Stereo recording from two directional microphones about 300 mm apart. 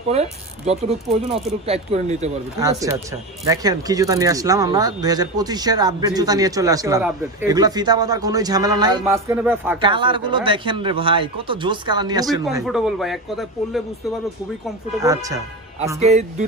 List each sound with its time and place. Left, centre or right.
0.7 s speech: right
2.6 s speech: centre
12.5 s speech: centre
15.0 s speech: centre
16.0 s speech: right